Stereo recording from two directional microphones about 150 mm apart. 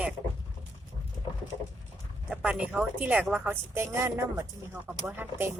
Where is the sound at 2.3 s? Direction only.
5° right (ahead or behind).